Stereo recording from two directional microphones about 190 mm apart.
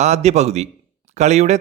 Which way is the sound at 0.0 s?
35° right (ahead or behind).